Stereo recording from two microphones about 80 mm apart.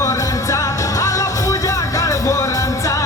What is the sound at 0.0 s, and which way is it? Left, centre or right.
Music, left.